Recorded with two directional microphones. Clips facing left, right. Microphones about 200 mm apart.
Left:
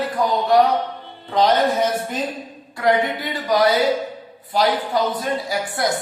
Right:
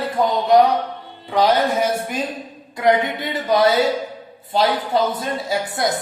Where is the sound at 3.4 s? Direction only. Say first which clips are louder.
Right 1 dB; 25° right (ahead or behind).